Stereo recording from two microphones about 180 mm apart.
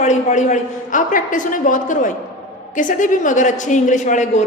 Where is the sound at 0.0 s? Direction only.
40° left (ahead or behind).